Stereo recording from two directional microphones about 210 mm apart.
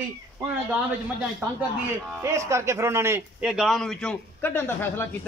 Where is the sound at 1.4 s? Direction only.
10° right (ahead or behind); by 5.0 s 10° left (ahead or behind).